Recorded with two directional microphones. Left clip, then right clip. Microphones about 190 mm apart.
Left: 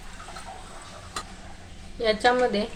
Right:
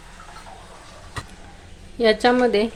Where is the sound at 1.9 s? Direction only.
35° right (ahead or behind).